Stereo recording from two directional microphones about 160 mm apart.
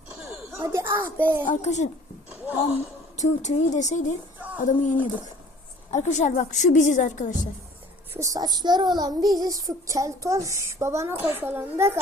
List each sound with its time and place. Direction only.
0.3 s a sound: 15° right (ahead or behind)
1.6 s a woman's voice: 50° left (ahead or behind)
3.2 s a woman's voice: 50° left (ahead or behind)
4.4 s a sound: 10° right (ahead or behind)
4.6 s a woman's voice: 50° left (ahead or behind)
8.1 s child singing: 20° right (ahead or behind)